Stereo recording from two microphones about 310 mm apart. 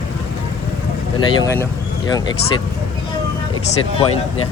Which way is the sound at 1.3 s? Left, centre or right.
Centre.